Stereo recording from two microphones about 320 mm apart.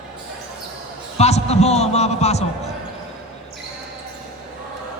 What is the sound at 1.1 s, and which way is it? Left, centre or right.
A man's voice, centre.